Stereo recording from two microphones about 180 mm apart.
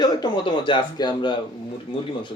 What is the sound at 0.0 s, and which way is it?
Speech, 25° left (ahead or behind).